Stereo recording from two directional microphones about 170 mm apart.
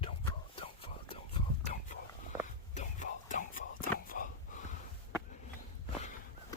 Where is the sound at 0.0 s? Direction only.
35° left (ahead or behind).